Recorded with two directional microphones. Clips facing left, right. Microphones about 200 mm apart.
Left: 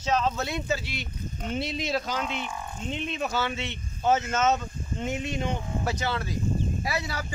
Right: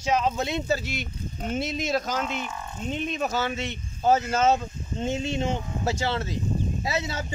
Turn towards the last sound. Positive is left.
turn(degrees=-20)  # may be behind; listen again after turning